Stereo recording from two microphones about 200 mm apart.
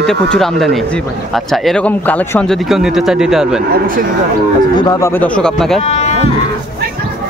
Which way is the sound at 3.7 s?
45° right (ahead or behind).